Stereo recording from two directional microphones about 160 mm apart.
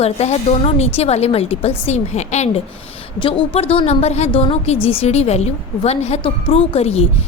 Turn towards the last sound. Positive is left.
turn(degrees=40)  # may be behind; listen again after turning